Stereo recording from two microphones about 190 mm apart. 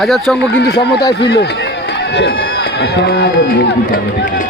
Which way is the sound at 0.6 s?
60° left (ahead or behind).